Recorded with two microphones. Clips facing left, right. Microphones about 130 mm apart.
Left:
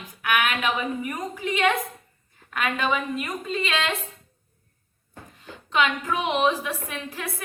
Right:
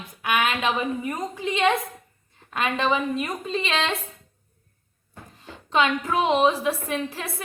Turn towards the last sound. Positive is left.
turn(degrees=-25)  # may be behind; listen again after turning